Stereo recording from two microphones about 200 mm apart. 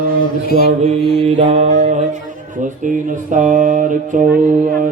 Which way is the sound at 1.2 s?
30° right (ahead or behind).